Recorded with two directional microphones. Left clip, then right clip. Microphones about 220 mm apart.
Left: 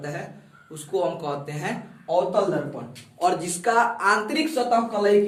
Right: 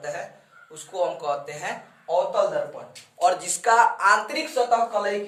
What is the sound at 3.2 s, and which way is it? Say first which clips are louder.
A man's voice: right 1 dB; 15° right (ahead or behind).